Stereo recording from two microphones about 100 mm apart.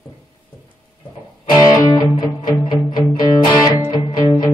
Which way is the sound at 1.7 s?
40° left (ahead or behind).